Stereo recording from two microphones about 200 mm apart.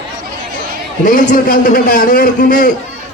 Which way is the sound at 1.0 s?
40° left (ahead or behind).